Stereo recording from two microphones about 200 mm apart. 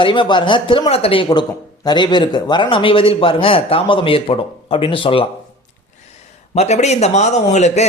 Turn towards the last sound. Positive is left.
turn(degrees=35)  # may be behind; listen again after turning